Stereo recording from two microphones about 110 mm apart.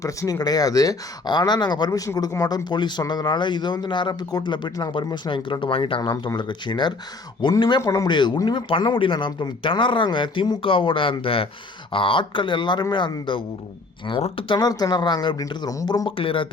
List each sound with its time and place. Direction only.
0.0 s speech: 30° left (ahead or behind)
7.8 s speech: 30° left (ahead or behind); by 13.4 s 45° left (ahead or behind)
14.2 s speech: 75° left (ahead or behind)
14.4 s speech: 40° left (ahead or behind)
16.0 s speech: 55° left (ahead or behind)